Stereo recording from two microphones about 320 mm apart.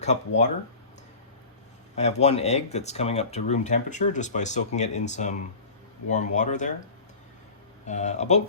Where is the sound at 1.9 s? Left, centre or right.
Left.